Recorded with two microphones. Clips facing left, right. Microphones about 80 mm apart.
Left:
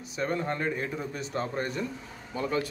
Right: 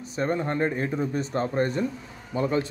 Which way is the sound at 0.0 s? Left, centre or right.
Right.